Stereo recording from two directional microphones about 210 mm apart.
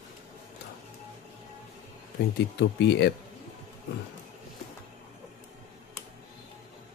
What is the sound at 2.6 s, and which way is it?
Speech, 55° left (ahead or behind).